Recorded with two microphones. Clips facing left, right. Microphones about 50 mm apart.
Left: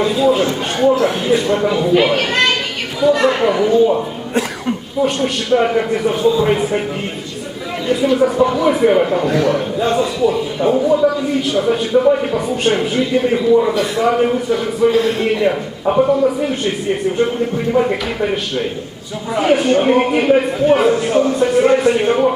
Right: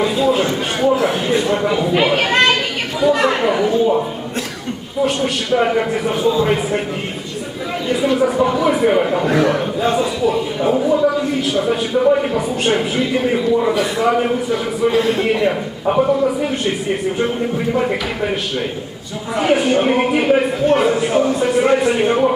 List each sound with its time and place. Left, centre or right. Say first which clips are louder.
0.0 s a man's voice: left 2 dB; centre
7.9 s a man's voice: left 2 dB; centre